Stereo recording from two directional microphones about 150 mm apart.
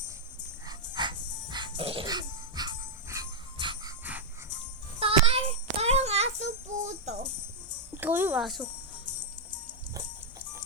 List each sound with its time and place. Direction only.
0.7 s music: 30° right (ahead or behind)
2.0 s jingle bell: 30° right (ahead or behind)
4.9 s child singing: 40° right (ahead or behind)
8.0 s music: 10° right (ahead or behind)
8.4 s speech: centre (ahead or behind)